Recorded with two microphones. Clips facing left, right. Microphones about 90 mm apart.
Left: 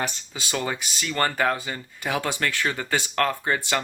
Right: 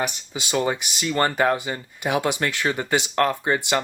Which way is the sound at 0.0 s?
20° right (ahead or behind).